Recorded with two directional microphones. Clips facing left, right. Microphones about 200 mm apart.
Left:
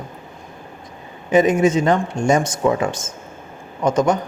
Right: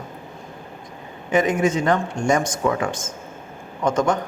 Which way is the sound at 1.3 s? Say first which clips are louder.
Left 4 dB; 20° left (ahead or behind).